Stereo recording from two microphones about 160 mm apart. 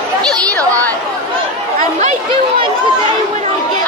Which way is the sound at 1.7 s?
50° right (ahead or behind).